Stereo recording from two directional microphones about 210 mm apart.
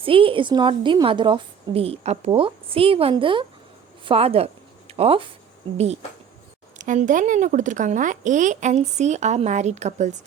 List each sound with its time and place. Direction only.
0.0 s a woman's voice: 25° right (ahead or behind)